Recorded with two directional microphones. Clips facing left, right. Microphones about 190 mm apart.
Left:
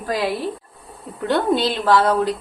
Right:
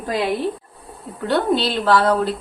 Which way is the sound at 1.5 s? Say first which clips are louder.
Even; 20° left (ahead or behind).